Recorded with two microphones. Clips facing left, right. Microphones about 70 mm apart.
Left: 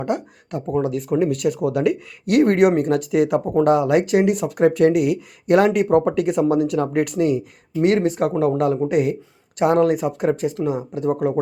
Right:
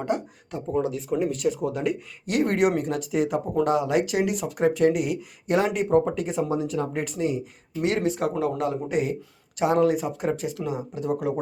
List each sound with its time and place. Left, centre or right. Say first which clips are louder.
0.0 s speech: left 3 dB; left
7.8 s speech: left 7 dB; left